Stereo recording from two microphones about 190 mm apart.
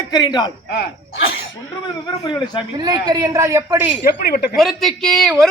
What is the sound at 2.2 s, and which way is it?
Speech, 25° left (ahead or behind).